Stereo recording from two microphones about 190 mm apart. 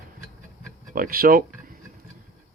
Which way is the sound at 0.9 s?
50° right (ahead or behind).